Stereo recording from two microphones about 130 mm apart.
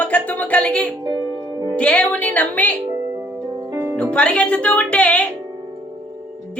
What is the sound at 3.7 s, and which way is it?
Music, 20° right (ahead or behind).